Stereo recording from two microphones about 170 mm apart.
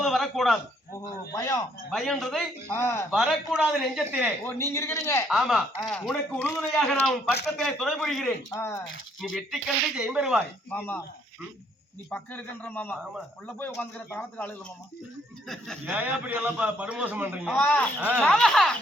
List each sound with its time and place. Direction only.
0.0 s a sound: centre (ahead or behind)
0.9 s a man's voice: 15° left (ahead or behind)
1.9 s speech: centre (ahead or behind)
2.7 s a man's voice: 15° left (ahead or behind)
3.1 s speech: 5° right (ahead or behind)
4.4 s a man's voice: 15° left (ahead or behind)
5.3 s speech: centre (ahead or behind)
8.5 s a man's voice: 15° left (ahead or behind)
9.3 s speech: centre (ahead or behind)
10.7 s a man's voice: 10° left (ahead or behind)
12.1 s a man's voice: 10° left (ahead or behind)
14.1 s a man's voice: 10° left (ahead or behind)
16.0 s a man's voice: 10° right (ahead or behind)
17.5 s a man's voice: 10° left (ahead or behind)